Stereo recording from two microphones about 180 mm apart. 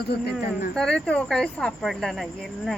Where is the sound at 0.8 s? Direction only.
5° left (ahead or behind).